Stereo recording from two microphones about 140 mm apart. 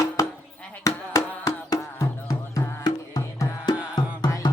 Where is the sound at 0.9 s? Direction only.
25° left (ahead or behind).